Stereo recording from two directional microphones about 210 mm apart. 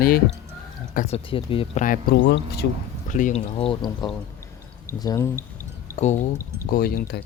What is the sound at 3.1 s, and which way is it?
Speech, 35° left (ahead or behind).